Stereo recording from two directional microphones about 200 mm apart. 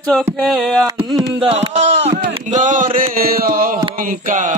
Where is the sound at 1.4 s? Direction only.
30° right (ahead or behind).